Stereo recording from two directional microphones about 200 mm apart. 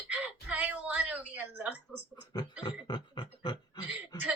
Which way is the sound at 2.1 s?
20° left (ahead or behind).